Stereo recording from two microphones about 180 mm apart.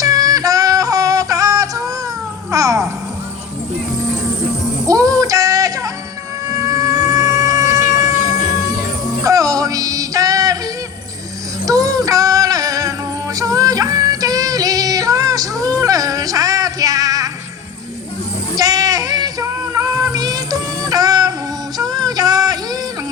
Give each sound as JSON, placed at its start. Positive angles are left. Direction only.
{"t": 0.0, "sound": "yodeling", "side_deg": -20}
{"t": 2.5, "sound": "music", "side_deg": -20}
{"t": 4.9, "sound": "music", "side_deg": -20}
{"t": 5.2, "sound": "a sound", "side_deg": -20}
{"t": 6.6, "sound": "music", "side_deg": -20}
{"t": 9.2, "sound": "music", "side_deg": -20}
{"t": 11.6, "sound": "music", "side_deg": -20}
{"t": 18.5, "sound": "music", "side_deg": -20}